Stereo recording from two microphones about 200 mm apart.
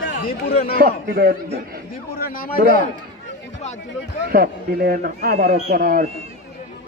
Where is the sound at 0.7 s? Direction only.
50° right (ahead or behind).